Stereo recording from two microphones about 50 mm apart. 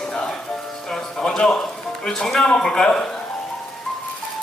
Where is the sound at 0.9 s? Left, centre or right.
Centre.